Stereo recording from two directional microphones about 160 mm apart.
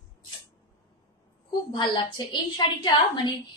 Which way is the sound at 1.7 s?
30° left (ahead or behind).